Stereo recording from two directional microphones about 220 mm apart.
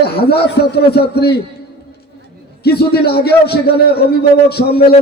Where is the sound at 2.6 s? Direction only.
45° left (ahead or behind).